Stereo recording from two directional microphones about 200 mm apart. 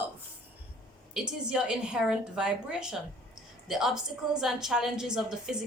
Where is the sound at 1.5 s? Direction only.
5° right (ahead or behind).